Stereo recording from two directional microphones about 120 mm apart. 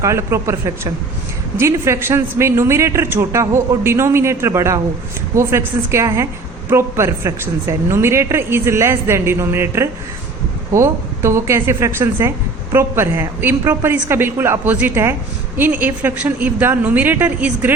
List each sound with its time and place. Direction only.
0.0 s a woman's voice: 25° right (ahead or behind)